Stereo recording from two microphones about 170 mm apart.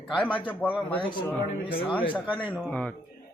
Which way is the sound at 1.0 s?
30° left (ahead or behind).